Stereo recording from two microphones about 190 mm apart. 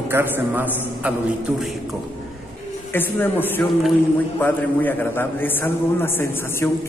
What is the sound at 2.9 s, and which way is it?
A man's voice, 10° left (ahead or behind).